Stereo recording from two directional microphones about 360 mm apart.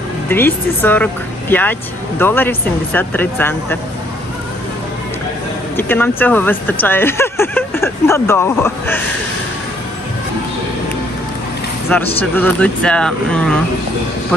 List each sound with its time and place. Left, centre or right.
0.3 s speech: centre
5.8 s speech: centre
12.2 s speech: centre